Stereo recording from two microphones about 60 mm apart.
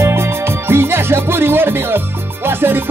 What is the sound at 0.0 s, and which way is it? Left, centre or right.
Music, right.